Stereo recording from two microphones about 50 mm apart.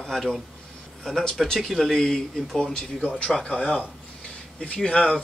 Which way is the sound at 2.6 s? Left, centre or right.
Centre.